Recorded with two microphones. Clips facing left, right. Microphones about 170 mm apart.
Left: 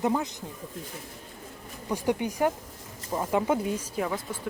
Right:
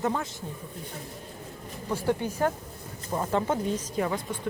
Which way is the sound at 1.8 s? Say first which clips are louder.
Even; 15° left (ahead or behind).